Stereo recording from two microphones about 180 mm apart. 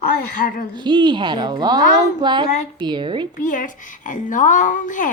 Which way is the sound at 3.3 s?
45° left (ahead or behind).